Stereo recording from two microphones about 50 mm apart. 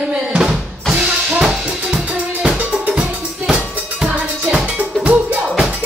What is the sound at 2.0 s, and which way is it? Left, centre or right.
Drum, right.